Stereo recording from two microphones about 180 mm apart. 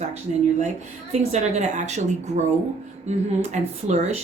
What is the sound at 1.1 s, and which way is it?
Speech, 40° right (ahead or behind).